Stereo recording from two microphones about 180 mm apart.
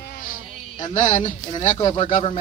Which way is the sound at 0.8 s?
40° left (ahead or behind).